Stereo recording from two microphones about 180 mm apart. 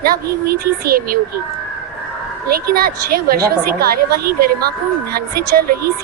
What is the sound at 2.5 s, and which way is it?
A woman's voice, 55° right (ahead or behind).